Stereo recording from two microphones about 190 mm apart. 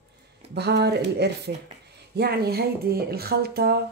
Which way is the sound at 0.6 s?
60° right (ahead or behind).